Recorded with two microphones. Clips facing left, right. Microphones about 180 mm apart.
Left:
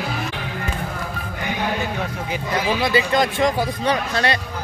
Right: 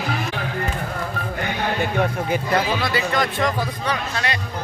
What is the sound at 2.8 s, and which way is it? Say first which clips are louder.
Speech: left 3 dB; 20° left (ahead or behind).